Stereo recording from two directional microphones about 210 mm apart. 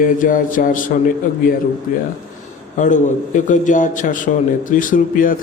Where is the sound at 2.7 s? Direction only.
35° left (ahead or behind).